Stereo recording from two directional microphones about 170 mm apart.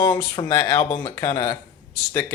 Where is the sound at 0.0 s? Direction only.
25° left (ahead or behind).